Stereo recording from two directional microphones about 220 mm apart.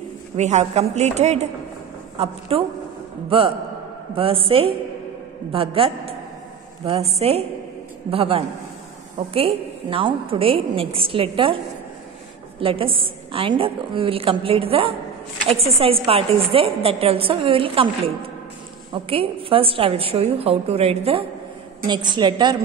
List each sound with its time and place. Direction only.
0.4 s a woman's voice: 30° right (ahead or behind)
12.5 s a woman's voice: 25° right (ahead or behind)